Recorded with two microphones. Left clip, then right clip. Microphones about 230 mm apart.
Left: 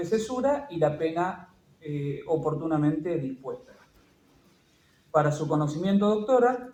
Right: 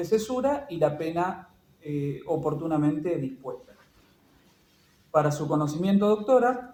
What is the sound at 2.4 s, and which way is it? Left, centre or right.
A man's voice, right.